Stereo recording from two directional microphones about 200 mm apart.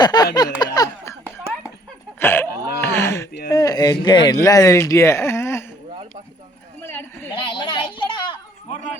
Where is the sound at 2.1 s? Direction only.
10° left (ahead or behind).